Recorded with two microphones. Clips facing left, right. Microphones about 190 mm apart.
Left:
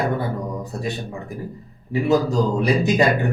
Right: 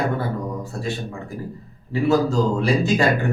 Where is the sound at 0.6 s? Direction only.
20° left (ahead or behind).